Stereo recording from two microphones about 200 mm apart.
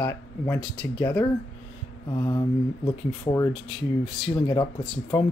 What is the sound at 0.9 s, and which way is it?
Speech, 15° left (ahead or behind).